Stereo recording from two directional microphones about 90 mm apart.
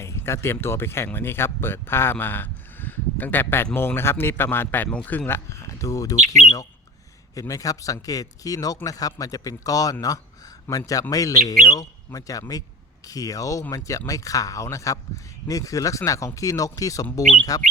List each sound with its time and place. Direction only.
0.0 s a man's voice: 30° left (ahead or behind)
5.5 s speech: 35° left (ahead or behind)